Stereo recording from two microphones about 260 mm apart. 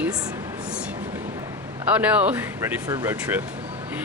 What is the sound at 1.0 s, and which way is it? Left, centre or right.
A man's voice, centre.